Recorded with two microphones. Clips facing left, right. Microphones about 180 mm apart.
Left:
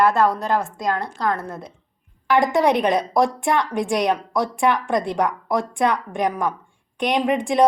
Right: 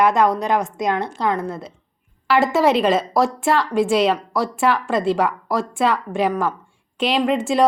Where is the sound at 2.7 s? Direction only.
20° left (ahead or behind).